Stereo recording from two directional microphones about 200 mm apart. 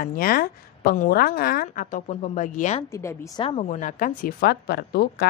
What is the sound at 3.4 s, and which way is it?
A woman's voice, 30° left (ahead or behind).